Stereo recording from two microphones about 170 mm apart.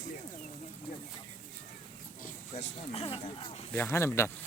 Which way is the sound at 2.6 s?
35° left (ahead or behind).